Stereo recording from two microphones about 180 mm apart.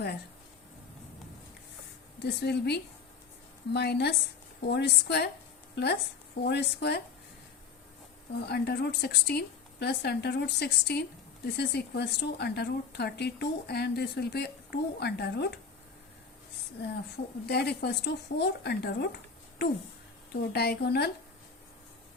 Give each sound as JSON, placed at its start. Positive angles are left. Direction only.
{"t": 2.1, "sound": "a woman's voice", "side_deg": 65}
{"t": 8.3, "sound": "a woman's voice", "side_deg": 65}
{"t": 17.4, "sound": "a woman's voice", "side_deg": 65}